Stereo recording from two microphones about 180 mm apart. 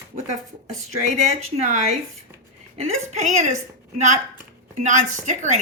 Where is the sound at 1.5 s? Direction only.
40° right (ahead or behind).